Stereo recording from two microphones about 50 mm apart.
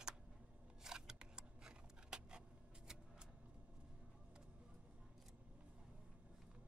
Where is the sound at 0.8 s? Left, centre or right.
Centre.